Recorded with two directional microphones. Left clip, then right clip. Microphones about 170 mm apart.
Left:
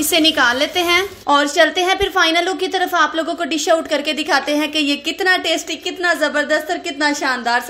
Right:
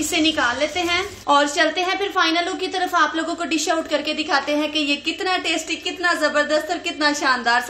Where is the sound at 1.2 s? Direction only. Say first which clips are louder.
Left 2 dB; 30° left (ahead or behind).